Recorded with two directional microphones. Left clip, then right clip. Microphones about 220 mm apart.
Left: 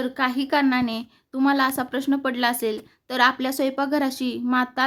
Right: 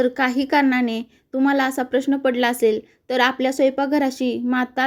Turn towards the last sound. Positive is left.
turn(degrees=-10)  # may be behind; listen again after turning